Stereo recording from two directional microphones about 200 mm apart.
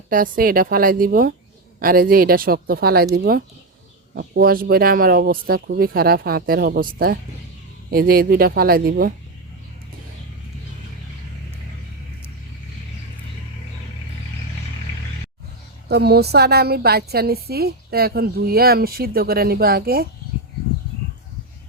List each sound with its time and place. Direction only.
0.1 s a woman's voice: 45° right (ahead or behind)
15.9 s a woman's voice: 55° right (ahead or behind)